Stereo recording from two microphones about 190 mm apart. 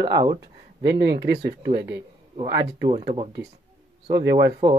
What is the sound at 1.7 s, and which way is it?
Speech, 25° right (ahead or behind).